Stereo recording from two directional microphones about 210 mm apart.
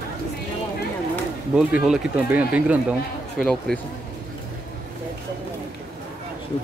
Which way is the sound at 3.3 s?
5° left (ahead or behind).